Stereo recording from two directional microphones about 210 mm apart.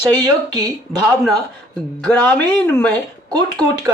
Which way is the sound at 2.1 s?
5° left (ahead or behind).